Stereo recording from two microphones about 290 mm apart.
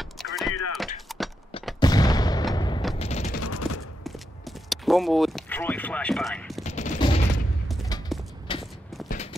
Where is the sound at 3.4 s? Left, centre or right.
Left.